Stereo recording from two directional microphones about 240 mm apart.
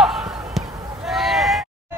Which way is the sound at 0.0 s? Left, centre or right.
Centre.